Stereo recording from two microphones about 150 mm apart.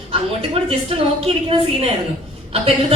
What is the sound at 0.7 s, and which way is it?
A woman's voice, 40° right (ahead or behind).